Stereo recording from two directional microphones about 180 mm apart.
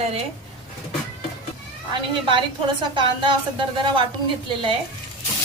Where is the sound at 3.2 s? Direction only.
25° right (ahead or behind).